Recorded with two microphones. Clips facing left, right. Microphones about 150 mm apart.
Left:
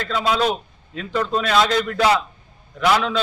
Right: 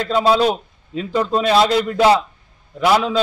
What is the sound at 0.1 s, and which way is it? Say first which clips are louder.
A man's voice: right 5 dB; 35° right (ahead or behind).